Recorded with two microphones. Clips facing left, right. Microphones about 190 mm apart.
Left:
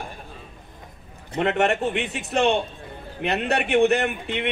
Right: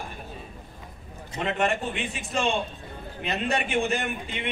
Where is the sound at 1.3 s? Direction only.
65° left (ahead or behind).